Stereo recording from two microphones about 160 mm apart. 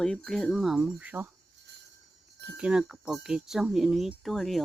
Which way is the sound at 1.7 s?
90° right.